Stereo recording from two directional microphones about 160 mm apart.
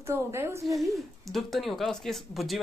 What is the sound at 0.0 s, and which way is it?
Speech, 15° right (ahead or behind).